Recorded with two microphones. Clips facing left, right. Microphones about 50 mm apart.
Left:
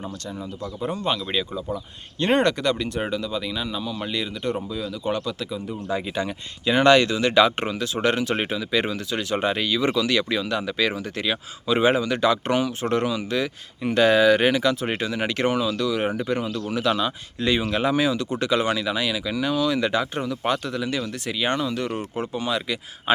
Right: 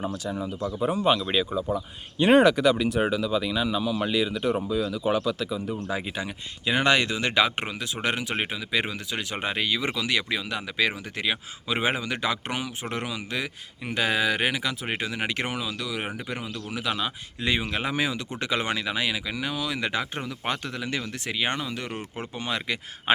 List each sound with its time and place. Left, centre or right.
0.0 s speech: centre; by 23.1 s right